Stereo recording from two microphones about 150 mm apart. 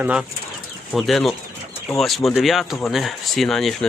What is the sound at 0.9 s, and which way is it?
Speech, centre (ahead or behind).